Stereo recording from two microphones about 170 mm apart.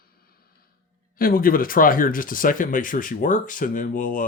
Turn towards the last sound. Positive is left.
turn(degrees=50)  # may be behind; listen again after turning